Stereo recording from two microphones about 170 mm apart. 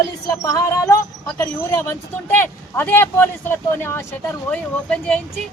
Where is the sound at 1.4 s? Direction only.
15° left (ahead or behind).